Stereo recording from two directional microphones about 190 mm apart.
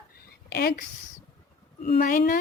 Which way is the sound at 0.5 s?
55° left (ahead or behind).